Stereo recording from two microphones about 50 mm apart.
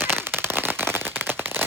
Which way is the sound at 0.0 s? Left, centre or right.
Right.